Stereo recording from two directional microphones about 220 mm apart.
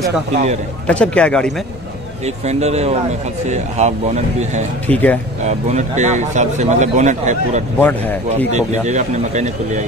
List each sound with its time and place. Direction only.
0.3 s speech: 30° right (ahead or behind)
0.8 s a man's voice: 5° left (ahead or behind)
2.2 s speech: 30° right (ahead or behind)
4.8 s speech: 5° left (ahead or behind)
5.4 s speech: 30° right (ahead or behind)
7.8 s speech: 10° left (ahead or behind)
8.5 s speech: 30° right (ahead or behind)